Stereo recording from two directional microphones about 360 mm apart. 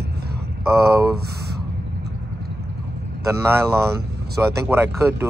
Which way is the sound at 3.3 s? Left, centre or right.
Centre.